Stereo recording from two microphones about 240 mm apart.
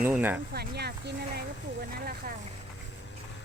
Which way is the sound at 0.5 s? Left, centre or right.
Right.